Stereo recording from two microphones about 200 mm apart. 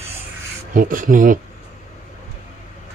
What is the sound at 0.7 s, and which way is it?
Speech, 45° right (ahead or behind).